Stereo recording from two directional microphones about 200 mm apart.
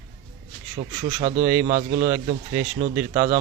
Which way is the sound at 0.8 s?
35° right (ahead or behind).